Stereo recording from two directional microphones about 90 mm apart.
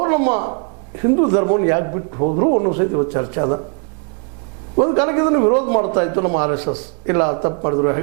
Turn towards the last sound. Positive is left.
turn(degrees=-20)  # may be behind; listen again after turning